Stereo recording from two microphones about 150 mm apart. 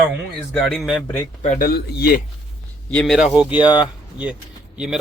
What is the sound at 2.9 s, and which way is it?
Speech, 5° left (ahead or behind).